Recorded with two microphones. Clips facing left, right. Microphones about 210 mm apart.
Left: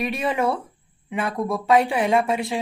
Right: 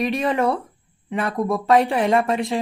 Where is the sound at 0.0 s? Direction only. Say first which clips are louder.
Right 3 dB; centre (ahead or behind).